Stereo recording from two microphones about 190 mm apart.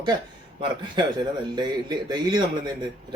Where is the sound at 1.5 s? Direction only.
20° right (ahead or behind).